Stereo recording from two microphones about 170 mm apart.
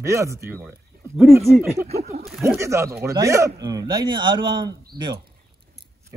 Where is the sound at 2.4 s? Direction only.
15° right (ahead or behind).